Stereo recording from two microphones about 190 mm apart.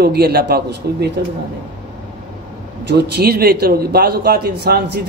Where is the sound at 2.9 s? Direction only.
60° right (ahead or behind).